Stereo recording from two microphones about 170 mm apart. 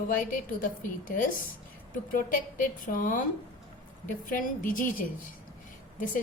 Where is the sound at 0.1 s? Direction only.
55° left (ahead or behind).